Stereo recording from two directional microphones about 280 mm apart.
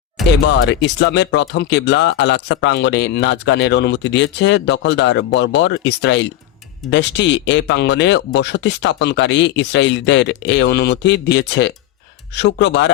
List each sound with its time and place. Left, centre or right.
0.4 s speech: left